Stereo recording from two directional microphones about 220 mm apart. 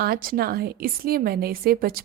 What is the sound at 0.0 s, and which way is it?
Speech, 40° right (ahead or behind).